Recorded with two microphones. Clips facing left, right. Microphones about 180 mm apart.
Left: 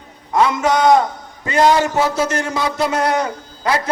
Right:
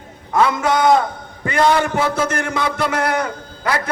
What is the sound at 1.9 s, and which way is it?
Speech, 55° right (ahead or behind).